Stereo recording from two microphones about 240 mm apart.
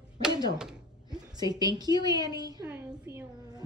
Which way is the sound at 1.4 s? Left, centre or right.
Centre.